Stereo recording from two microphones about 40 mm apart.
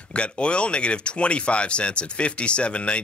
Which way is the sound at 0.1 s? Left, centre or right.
Left.